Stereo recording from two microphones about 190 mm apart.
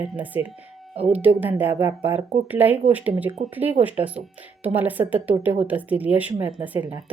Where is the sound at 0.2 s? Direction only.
10° right (ahead or behind).